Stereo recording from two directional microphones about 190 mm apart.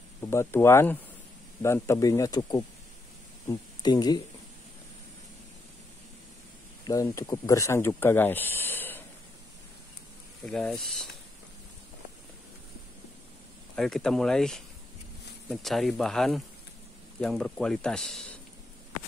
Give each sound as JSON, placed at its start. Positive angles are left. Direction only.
{"t": 0.2, "sound": "speech", "side_deg": 15}
{"t": 6.9, "sound": "speech", "side_deg": 15}
{"t": 10.4, "sound": "speech", "side_deg": 5}
{"t": 13.7, "sound": "speech", "side_deg": 0}